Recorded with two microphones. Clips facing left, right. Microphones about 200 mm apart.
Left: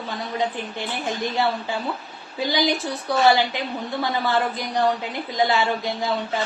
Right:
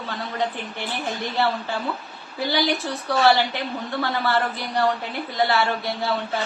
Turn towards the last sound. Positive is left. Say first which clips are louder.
# left 1 dB
turn(degrees=15)  # may be behind; listen again after turning